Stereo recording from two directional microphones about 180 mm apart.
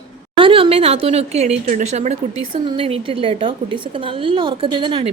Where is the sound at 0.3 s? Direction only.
30° right (ahead or behind).